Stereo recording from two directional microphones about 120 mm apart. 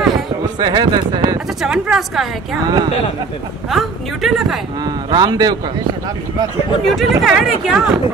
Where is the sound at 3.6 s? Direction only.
Centre (ahead or behind).